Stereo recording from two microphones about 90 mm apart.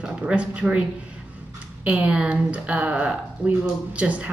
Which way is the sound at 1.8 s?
15° right (ahead or behind).